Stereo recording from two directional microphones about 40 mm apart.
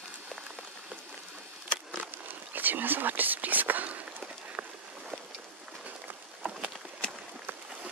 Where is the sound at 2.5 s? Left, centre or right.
Right.